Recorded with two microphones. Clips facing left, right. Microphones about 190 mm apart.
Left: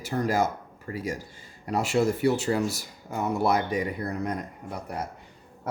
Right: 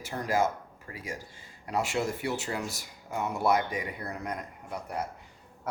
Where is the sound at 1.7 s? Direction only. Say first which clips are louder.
Left 6 dB; 40° left (ahead or behind).